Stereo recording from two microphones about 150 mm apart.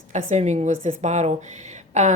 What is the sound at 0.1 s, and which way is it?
A woman's voice, 50° right (ahead or behind).